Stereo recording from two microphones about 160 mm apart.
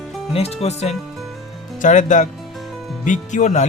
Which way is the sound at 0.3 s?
40° left (ahead or behind).